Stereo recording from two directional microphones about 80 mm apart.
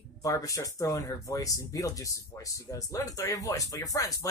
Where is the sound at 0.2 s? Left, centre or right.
Left.